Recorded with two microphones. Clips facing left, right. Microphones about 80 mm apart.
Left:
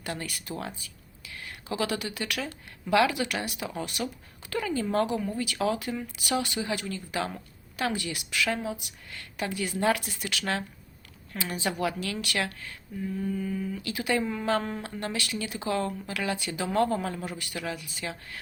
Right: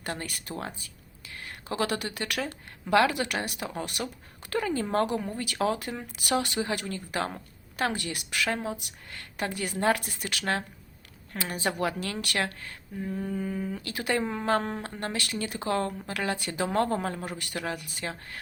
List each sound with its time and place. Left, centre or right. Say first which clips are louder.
0.0 s speech: even; right
1.7 s speech: right 1 dB; right
8.4 s speech: right 1 dB; right
9.1 s speech: even; right
14.8 s speech: even; right